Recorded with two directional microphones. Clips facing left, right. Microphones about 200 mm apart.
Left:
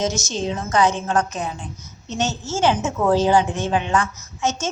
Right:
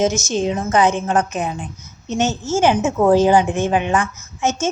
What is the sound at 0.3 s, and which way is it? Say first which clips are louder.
A woman's voice: right 5 dB; 15° right (ahead or behind).